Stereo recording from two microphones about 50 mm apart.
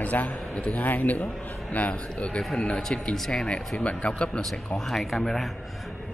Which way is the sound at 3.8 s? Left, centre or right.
Left.